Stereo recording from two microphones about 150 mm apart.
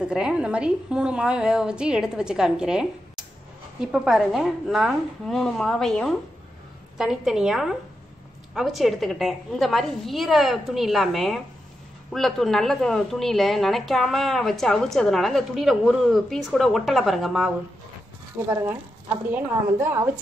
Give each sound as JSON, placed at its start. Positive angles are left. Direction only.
{"t": 0.0, "sound": "a woman's voice", "side_deg": -5}
{"t": 18.5, "sound": "a woman's voice", "side_deg": -15}